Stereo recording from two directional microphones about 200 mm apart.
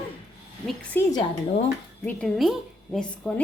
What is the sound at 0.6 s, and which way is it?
A woman's voice, 5° left (ahead or behind).